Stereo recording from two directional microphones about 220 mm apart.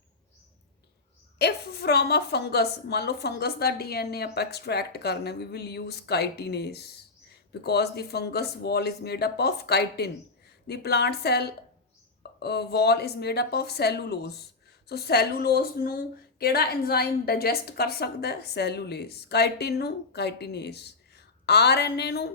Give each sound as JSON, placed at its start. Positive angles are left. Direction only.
{"t": 1.4, "sound": "a woman's voice", "side_deg": 45}